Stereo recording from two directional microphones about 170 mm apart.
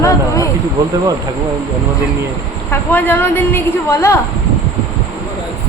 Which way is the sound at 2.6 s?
10° left (ahead or behind).